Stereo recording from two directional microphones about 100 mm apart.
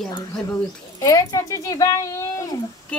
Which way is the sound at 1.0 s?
35° left (ahead or behind).